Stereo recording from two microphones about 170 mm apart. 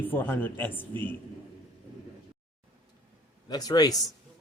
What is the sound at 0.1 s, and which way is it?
Speech, 10° left (ahead or behind).